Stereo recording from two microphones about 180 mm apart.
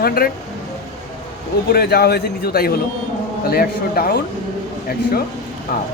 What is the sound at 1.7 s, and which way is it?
A man's voice, 60° left (ahead or behind).